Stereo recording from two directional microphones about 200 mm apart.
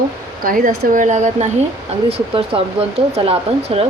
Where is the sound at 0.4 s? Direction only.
45° right (ahead or behind).